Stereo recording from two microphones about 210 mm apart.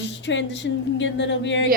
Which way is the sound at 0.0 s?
60° left (ahead or behind).